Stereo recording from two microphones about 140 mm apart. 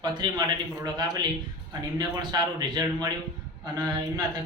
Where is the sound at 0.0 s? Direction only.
30° right (ahead or behind).